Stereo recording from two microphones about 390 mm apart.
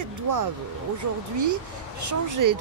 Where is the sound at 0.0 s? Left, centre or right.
Right.